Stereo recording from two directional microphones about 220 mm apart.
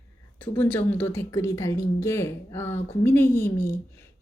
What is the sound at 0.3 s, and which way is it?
Speech, 10° left (ahead or behind).